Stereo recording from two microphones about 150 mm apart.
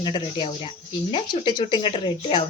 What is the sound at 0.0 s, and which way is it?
Speech, 30° left (ahead or behind).